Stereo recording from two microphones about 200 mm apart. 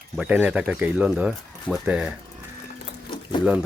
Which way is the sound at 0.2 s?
10° right (ahead or behind).